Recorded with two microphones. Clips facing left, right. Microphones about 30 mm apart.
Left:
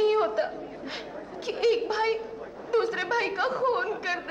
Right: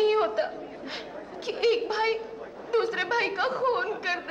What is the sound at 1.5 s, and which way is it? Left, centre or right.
A woman's voice, right.